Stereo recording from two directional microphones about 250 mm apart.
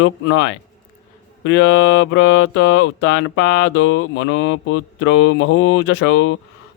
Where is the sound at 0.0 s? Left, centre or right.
Left.